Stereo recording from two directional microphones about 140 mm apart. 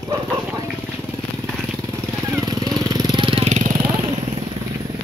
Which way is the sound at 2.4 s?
25° right (ahead or behind).